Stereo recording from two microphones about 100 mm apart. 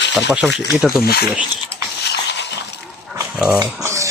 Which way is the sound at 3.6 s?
30° right (ahead or behind).